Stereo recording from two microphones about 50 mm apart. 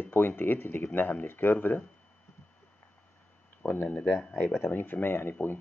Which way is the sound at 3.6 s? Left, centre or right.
Left.